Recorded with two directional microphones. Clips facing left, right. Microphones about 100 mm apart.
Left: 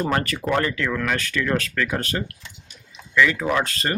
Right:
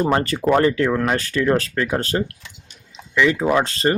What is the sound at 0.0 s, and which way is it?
Speech, 25° right (ahead or behind).